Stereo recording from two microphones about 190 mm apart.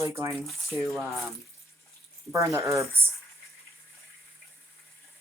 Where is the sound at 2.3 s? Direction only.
15° right (ahead or behind).